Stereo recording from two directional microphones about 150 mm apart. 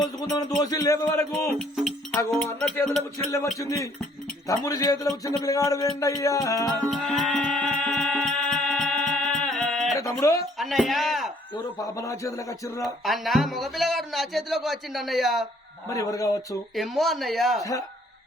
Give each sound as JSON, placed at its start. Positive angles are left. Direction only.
{"t": 0.0, "sound": "a sound", "side_deg": 25}
{"t": 0.6, "sound": "music", "side_deg": 25}
{"t": 1.5, "sound": "speech", "side_deg": 0}
{"t": 3.6, "sound": "music", "side_deg": 20}
{"t": 6.9, "sound": "music", "side_deg": 0}
{"t": 10.0, "sound": "music", "side_deg": 20}
{"t": 10.6, "sound": "speech", "side_deg": 0}
{"t": 11.8, "sound": "music", "side_deg": 20}
{"t": 12.8, "sound": "speech", "side_deg": 0}
{"t": 15.9, "sound": "music", "side_deg": 20}
{"t": 16.7, "sound": "speech", "side_deg": 0}
{"t": 17.6, "sound": "music", "side_deg": 20}